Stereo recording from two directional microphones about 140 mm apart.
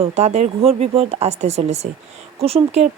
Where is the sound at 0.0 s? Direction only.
50° right (ahead or behind).